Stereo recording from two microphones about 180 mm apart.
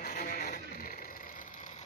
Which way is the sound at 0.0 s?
55° left (ahead or behind).